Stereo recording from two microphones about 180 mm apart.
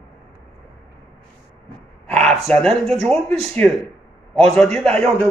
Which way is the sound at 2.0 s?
5° left (ahead or behind).